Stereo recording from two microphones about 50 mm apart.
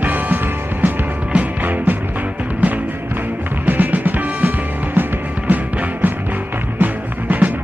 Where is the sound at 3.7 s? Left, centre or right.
Right.